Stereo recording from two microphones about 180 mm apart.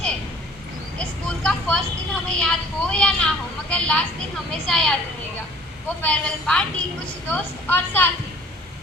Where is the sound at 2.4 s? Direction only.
5° left (ahead or behind).